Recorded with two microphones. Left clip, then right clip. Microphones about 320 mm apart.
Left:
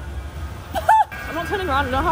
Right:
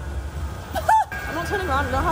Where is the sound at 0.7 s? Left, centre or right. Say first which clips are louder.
Left 3 dB; centre.